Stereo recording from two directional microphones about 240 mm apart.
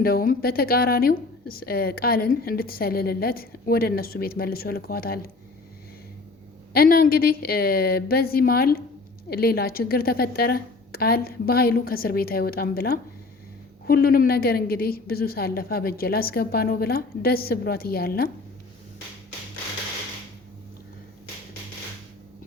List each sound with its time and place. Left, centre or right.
0.0 s a woman's voice: left
6.7 s a woman's voice: left